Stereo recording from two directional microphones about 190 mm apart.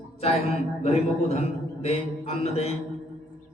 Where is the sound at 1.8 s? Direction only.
35° left (ahead or behind).